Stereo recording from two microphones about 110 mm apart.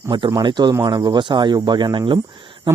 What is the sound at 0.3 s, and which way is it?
Speech, 40° right (ahead or behind).